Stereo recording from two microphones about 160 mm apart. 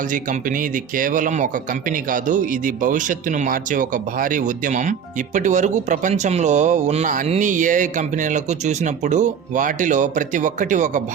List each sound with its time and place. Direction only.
0.0 s a man's voice: 55° right (ahead or behind)